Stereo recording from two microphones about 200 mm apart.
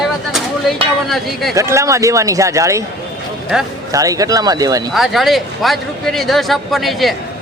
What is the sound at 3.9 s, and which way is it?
Speech, 15° right (ahead or behind).